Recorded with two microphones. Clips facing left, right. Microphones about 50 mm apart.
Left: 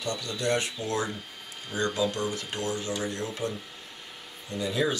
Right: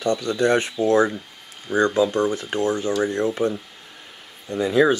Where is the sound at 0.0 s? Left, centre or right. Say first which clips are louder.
Right 10 dB; right.